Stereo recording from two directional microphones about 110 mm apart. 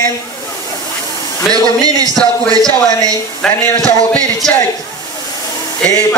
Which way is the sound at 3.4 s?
10° left (ahead or behind).